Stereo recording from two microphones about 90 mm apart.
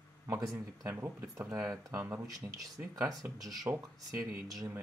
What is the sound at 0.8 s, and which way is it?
Speech, 30° right (ahead or behind).